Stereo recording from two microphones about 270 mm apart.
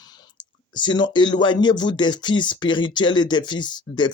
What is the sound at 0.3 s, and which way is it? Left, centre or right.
Speech, centre.